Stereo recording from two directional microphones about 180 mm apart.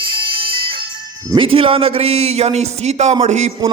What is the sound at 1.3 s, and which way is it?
A man's voice, 30° right (ahead or behind).